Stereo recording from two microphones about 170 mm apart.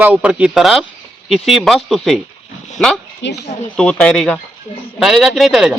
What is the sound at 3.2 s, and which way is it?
Speech, 90° left.